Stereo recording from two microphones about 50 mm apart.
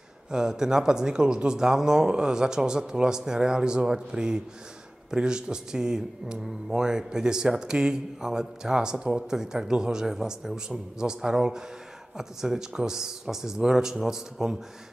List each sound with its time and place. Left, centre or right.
0.3 s speech: centre